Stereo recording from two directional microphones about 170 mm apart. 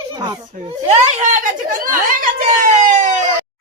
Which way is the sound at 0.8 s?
40° right (ahead or behind).